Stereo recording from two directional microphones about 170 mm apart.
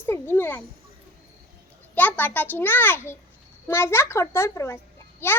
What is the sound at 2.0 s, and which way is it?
A child's voice, 10° left (ahead or behind).